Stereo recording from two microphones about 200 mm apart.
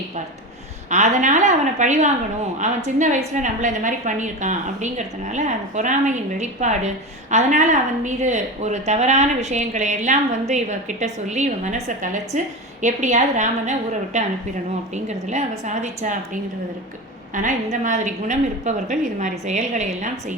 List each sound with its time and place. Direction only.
0.9 s a woman's voice: 35° right (ahead or behind)